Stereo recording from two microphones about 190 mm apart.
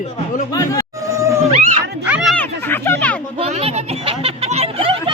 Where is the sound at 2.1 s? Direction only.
5° right (ahead or behind).